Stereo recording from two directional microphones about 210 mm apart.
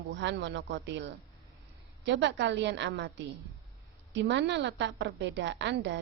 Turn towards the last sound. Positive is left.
turn(degrees=-55)  # may be behind; listen again after turning